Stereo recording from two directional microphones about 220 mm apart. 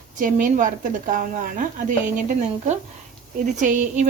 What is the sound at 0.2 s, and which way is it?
Speech, 35° right (ahead or behind).